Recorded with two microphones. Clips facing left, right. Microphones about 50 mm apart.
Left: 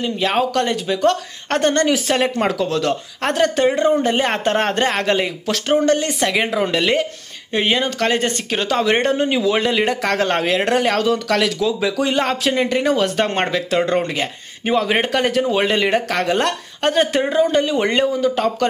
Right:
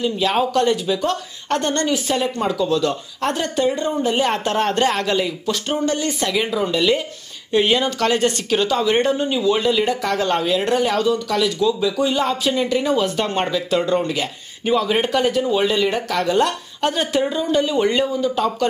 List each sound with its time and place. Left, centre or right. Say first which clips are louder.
0.0 s speech: even; left
1.0 s a woman's voice: left 5 dB; left
4.1 s speech: left 1 dB; left
5.5 s speech: left 7 dB; left
5.9 s speech: left 4 dB; left
6.5 s speech: even; left
7.5 s speech: right 1 dB; left
8.6 s speech: left 2 dB; left
11.0 s a woman's voice: left 1 dB; left
17.3 s speech: left 3 dB; left